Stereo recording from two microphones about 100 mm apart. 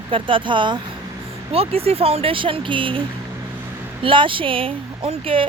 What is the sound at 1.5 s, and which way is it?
Speech, 80° right.